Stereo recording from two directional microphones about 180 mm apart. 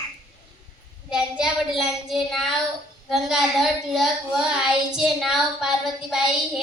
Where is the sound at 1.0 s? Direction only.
5° right (ahead or behind).